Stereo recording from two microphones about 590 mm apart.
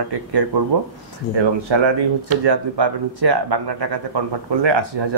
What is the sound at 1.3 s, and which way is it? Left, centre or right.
Speech, right.